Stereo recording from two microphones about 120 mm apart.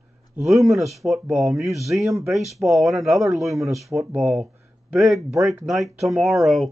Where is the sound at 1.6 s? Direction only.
25° right (ahead or behind).